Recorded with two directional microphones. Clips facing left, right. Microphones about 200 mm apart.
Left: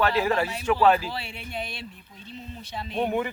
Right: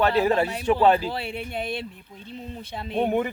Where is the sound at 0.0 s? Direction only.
35° right (ahead or behind).